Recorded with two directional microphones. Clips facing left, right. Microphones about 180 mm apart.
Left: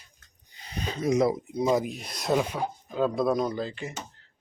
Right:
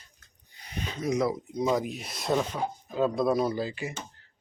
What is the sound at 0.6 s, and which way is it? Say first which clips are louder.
Speech: left 3 dB; 30° left (ahead or behind).